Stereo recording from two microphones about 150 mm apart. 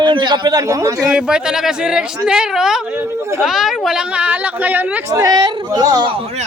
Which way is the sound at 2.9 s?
20° right (ahead or behind).